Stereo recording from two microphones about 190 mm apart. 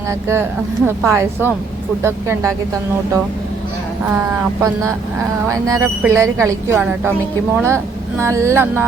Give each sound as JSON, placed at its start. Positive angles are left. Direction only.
{"t": 0.1, "sound": "a woman's voice", "side_deg": -15}
{"t": 4.1, "sound": "a woman's voice", "side_deg": -10}